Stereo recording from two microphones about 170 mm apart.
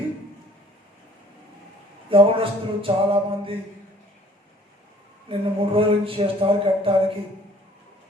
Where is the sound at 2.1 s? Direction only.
30° right (ahead or behind).